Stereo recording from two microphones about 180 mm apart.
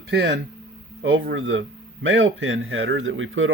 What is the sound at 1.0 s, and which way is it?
Speech, 90° right.